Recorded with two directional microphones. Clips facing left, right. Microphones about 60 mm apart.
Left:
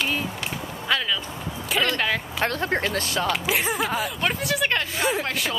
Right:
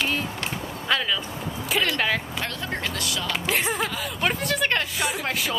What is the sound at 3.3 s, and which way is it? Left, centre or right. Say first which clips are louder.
Speech: right 2 dB; centre.